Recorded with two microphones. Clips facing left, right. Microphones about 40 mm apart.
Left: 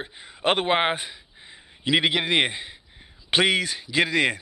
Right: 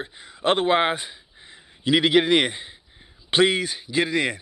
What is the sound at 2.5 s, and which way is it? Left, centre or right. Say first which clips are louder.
A man's voice: left 1 dB; left.